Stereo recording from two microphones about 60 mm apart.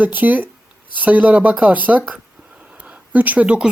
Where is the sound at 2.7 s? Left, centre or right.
Right.